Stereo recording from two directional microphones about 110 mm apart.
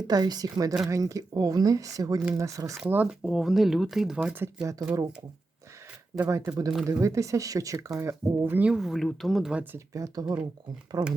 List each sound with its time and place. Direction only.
0.1 s speech: 35° right (ahead or behind)
2.8 s speech: 10° right (ahead or behind)
4.4 s speech: 25° right (ahead or behind)
6.2 s speech: 30° right (ahead or behind)
8.5 s speech: 10° right (ahead or behind)
9.7 s speech: 30° right (ahead or behind)